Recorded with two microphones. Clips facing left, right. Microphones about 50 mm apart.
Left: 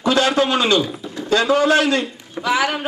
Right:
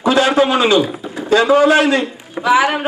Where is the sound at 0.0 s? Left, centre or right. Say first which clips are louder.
Right 4 dB; right.